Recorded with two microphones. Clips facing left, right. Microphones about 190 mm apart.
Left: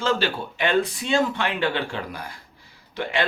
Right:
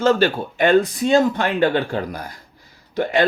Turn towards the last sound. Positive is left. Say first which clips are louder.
# right 7 dB
turn(degrees=-45)  # may be behind; listen again after turning